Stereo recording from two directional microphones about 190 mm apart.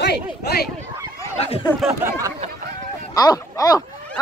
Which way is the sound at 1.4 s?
30° left (ahead or behind).